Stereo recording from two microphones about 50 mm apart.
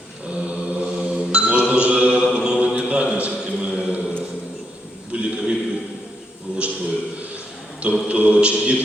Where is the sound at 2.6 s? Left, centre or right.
Right.